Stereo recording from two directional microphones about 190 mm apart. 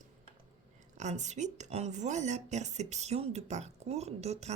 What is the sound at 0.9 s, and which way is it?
Speech, 40° right (ahead or behind).